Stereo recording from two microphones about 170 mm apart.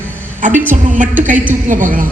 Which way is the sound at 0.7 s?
50° right (ahead or behind).